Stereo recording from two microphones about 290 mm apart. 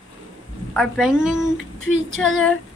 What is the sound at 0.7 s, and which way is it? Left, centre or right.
A woman's voice, centre.